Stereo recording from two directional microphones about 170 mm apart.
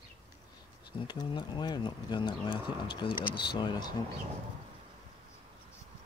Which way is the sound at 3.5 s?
25° left (ahead or behind).